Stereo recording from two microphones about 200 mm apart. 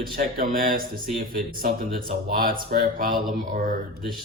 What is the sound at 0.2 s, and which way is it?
Speech, 45° right (ahead or behind).